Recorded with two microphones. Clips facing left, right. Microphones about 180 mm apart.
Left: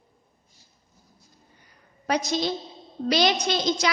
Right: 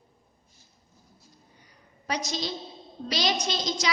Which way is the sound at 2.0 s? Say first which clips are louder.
Left 6 dB; 55° left (ahead or behind).